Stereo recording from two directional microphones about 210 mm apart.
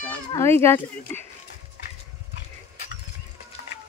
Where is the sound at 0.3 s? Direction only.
10° left (ahead or behind).